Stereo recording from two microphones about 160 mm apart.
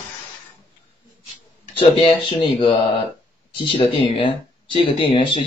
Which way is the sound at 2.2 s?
35° left (ahead or behind).